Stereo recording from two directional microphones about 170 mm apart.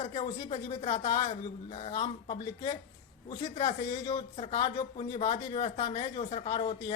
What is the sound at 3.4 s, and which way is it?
Speech, 35° left (ahead or behind).